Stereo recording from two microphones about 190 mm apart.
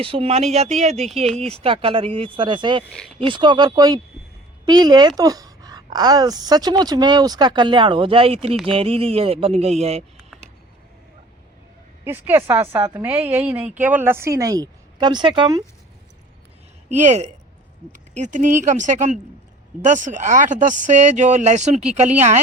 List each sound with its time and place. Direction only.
0.0 s a woman's voice: 30° right (ahead or behind)
12.0 s a woman's voice: 10° right (ahead or behind)
16.9 s speech: 40° right (ahead or behind)